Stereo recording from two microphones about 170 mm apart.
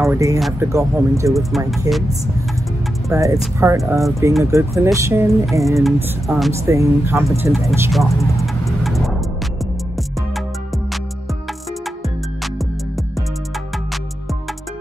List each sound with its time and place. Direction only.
0.0 s speech: 20° right (ahead or behind)
1.7 s speech: centre (ahead or behind)
3.1 s speech: 20° right (ahead or behind)
6.2 s speech: centre (ahead or behind)
6.5 s speech: 15° right (ahead or behind)
8.4 s vehicle: centre (ahead or behind)